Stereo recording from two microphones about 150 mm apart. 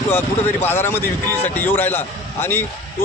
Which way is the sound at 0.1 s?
15° left (ahead or behind).